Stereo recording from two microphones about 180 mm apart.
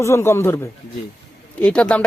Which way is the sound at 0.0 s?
15° left (ahead or behind).